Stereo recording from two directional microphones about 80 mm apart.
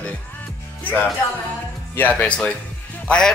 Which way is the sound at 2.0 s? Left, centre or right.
Centre.